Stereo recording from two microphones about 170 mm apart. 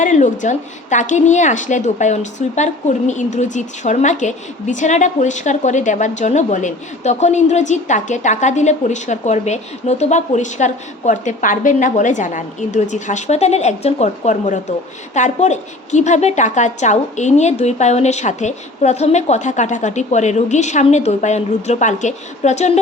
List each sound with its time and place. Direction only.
0.0 s a woman's voice: 45° left (ahead or behind)